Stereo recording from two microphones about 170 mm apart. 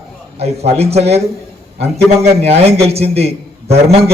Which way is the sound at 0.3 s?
40° right (ahead or behind).